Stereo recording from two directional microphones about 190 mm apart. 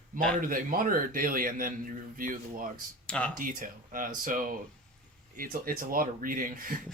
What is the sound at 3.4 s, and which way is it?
Speech, 45° right (ahead or behind).